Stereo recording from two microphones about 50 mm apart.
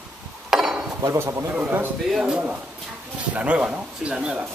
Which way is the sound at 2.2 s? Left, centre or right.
Right.